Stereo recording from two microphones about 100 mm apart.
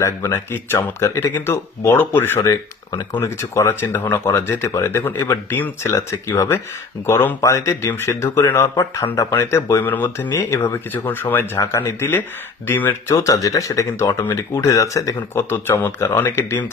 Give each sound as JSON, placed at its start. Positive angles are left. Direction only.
{"t": 0.0, "sound": "speech", "side_deg": 30}
{"t": 2.9, "sound": "speech", "side_deg": 45}
{"t": 3.2, "sound": "speech", "side_deg": 30}
{"t": 13.2, "sound": "speech", "side_deg": 35}